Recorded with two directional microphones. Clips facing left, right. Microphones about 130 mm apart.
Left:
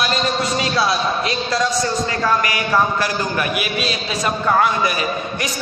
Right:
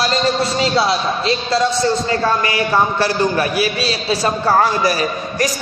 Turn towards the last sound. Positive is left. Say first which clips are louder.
# right 4 dB
turn(degrees=-40)  # may be behind; listen again after turning